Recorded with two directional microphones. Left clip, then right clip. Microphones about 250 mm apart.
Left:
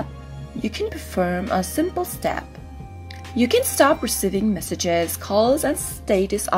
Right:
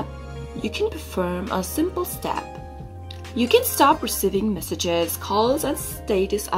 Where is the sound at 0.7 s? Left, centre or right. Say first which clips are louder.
Right 2 dB; centre.